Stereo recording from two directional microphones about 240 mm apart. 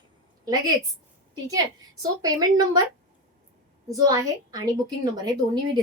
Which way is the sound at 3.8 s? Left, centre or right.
Centre.